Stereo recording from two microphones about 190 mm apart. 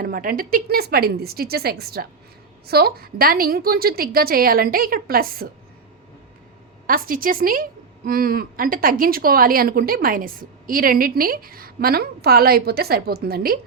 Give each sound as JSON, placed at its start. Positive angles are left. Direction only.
{"t": 0.0, "sound": "a woman's voice", "side_deg": -50}
{"t": 6.8, "sound": "a woman's voice", "side_deg": -50}